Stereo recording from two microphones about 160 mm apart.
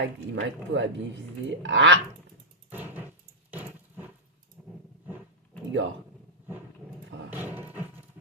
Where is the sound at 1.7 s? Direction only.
90° right.